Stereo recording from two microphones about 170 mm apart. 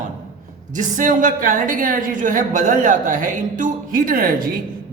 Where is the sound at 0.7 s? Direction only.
50° right (ahead or behind).